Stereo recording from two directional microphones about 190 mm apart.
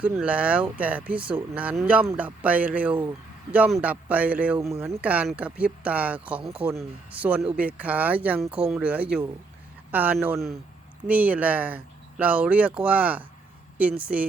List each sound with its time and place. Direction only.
0.0 s speech: 5° right (ahead or behind)